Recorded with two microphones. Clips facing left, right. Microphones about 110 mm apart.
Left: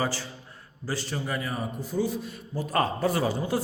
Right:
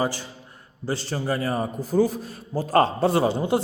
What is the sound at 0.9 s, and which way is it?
A man's voice, 30° right (ahead or behind).